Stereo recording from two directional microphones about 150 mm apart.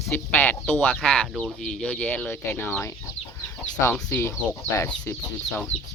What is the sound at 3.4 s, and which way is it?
Chicken, 15° left (ahead or behind).